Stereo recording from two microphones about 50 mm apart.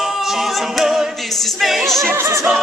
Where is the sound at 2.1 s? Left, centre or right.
Right.